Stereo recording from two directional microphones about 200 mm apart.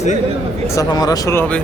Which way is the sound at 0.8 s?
20° left (ahead or behind).